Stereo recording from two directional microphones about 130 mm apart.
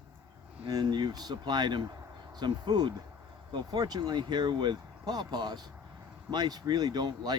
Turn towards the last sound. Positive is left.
turn(degrees=-35)  # may be behind; listen again after turning